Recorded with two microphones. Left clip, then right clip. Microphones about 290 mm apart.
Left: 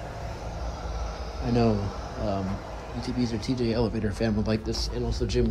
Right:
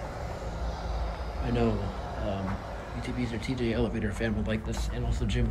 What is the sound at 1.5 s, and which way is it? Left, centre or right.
Speech, left.